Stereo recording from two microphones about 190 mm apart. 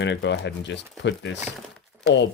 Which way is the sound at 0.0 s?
65° left (ahead or behind).